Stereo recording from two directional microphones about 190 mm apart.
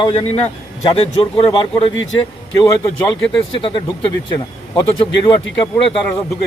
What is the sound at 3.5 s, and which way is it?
Speech, 25° left (ahead or behind).